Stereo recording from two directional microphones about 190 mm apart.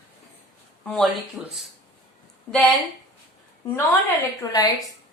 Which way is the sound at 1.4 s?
5° right (ahead or behind).